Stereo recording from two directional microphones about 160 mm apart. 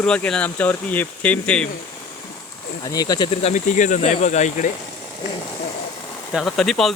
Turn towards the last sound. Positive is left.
turn(degrees=0)  # may be behind; listen again after turning